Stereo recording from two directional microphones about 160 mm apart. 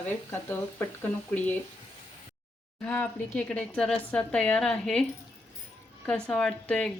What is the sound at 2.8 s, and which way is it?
Speech, 10° left (ahead or behind).